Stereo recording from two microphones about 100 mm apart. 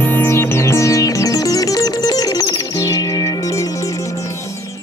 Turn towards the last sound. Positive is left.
turn(degrees=35)  # may be behind; listen again after turning